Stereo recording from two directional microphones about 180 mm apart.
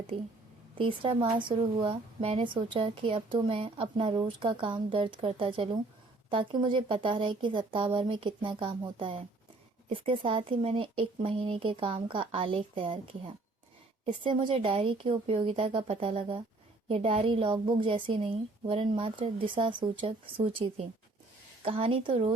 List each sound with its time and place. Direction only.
0.8 s a woman's voice: 30° right (ahead or behind)